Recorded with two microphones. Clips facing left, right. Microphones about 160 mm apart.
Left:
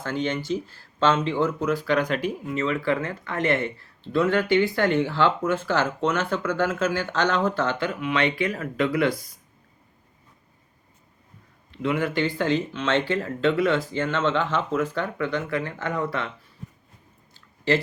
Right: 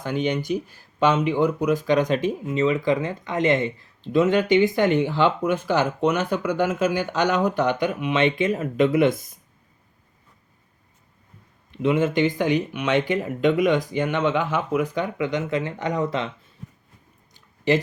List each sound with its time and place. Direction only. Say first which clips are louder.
0.0 s speech: right 3 dB; 15° right (ahead or behind)
11.7 s speech: right 4 dB; 20° right (ahead or behind)
17.7 s speech: right 2 dB; 20° right (ahead or behind)